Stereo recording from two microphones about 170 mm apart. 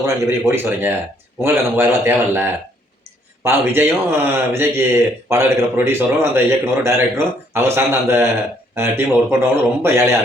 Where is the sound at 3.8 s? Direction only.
15° right (ahead or behind).